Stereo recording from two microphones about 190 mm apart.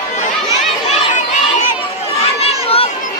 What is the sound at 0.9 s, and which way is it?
Chatter, 40° left (ahead or behind).